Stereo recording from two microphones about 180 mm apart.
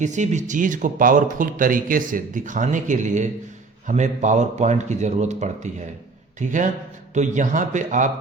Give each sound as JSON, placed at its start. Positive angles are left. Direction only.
{"t": 0.0, "sound": "speech", "side_deg": -40}